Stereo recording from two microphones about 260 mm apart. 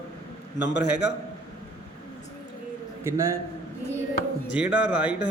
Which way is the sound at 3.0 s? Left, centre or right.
Centre.